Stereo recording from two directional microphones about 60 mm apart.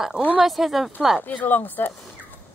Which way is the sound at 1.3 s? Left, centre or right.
Left.